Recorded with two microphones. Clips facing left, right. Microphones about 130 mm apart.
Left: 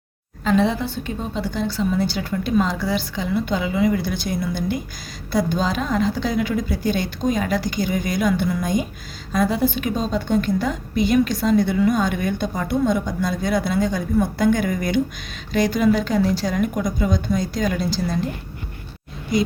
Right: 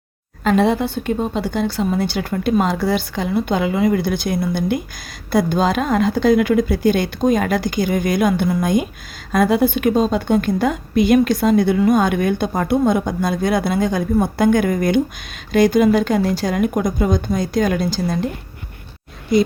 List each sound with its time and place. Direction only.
0.4 s a woman's voice: 55° right (ahead or behind)